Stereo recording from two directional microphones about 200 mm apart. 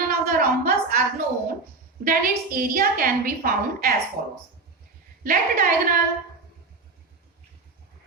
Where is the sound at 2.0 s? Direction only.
45° right (ahead or behind).